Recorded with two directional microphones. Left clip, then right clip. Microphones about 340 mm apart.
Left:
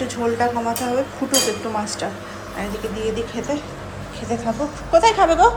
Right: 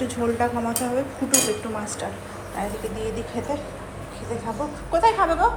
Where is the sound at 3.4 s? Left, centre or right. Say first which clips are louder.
Left 3 dB; centre.